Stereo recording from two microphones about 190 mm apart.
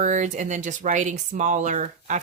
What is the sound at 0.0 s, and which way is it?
Speech, 40° right (ahead or behind).